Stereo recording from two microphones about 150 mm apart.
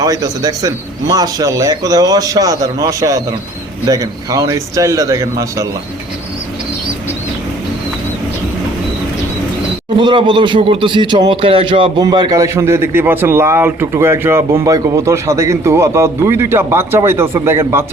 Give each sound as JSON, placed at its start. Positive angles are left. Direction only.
{"t": 0.0, "sound": "a man's voice", "side_deg": -25}
{"t": 10.0, "sound": "a man's voice", "side_deg": -30}